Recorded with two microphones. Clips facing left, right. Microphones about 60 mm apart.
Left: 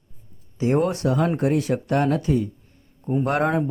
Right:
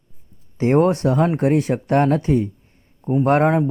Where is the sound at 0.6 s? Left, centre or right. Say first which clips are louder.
Right 5 dB; right.